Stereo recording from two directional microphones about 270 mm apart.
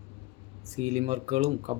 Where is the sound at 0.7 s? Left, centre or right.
Right.